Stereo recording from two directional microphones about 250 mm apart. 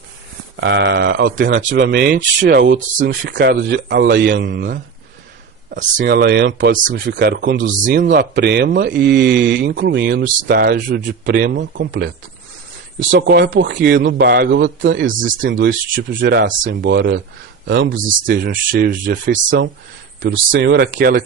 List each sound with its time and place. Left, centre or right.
0.5 s speech: right
1.8 s a man's voice: right
2.7 s speech: right
6.0 s a man's voice: right
7.7 s a man's voice: right
15.0 s speech: right
19.5 s a man's voice: right